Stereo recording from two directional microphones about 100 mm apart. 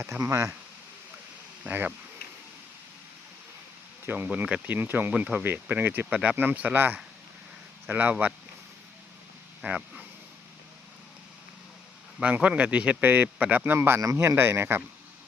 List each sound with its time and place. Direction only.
0.2 s speech: 30° right (ahead or behind)
1.6 s speech: 20° right (ahead or behind)
4.0 s speech: 20° right (ahead or behind)
9.6 s speech: 5° right (ahead or behind)
12.2 s speech: 15° right (ahead or behind)